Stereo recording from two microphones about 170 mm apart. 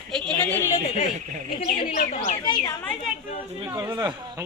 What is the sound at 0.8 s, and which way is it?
Speech, 45° left (ahead or behind).